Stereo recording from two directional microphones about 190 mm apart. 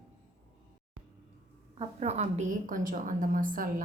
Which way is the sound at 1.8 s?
35° right (ahead or behind).